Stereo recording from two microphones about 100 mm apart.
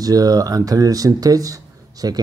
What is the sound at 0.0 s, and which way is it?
Speech, 40° right (ahead or behind).